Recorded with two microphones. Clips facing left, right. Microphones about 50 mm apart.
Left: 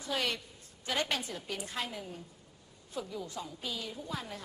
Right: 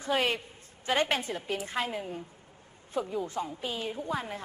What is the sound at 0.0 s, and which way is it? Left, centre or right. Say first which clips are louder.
Speech: right 6 dB; right.